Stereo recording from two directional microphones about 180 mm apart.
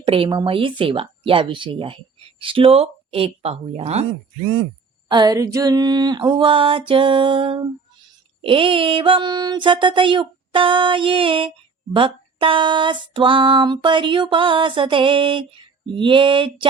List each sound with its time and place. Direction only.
0.0 s speech: 30° right (ahead or behind)
5.0 s speech: 25° right (ahead or behind)